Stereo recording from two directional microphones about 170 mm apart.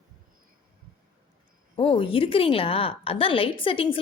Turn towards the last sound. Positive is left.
turn(degrees=30)  # may be behind; listen again after turning